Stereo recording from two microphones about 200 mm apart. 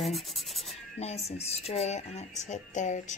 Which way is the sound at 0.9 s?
30° left (ahead or behind).